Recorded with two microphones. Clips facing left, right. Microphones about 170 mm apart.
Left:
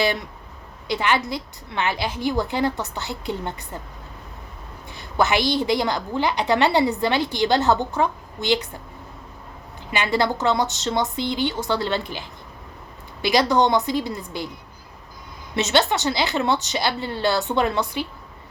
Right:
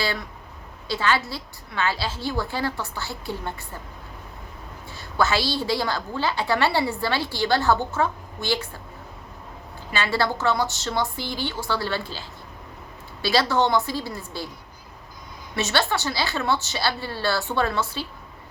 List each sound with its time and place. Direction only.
0.0 s a woman's voice: 20° left (ahead or behind)
4.9 s a woman's voice: 20° left (ahead or behind)
9.9 s a woman's voice: 20° left (ahead or behind)
15.5 s a woman's voice: 20° left (ahead or behind)